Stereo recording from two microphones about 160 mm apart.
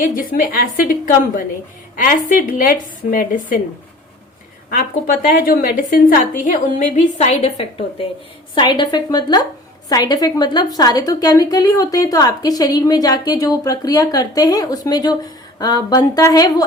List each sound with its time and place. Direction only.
0.0 s a woman's voice: 60° left (ahead or behind)
4.7 s a woman's voice: 60° left (ahead or behind); by 16.6 s 25° left (ahead or behind)